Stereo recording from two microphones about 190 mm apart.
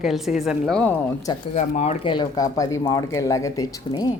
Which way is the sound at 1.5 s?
35° left (ahead or behind).